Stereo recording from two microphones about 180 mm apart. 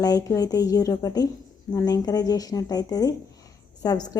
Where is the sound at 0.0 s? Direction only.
20° left (ahead or behind).